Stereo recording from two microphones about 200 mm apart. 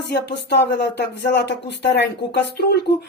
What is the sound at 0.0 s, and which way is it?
Speech, 55° left (ahead or behind).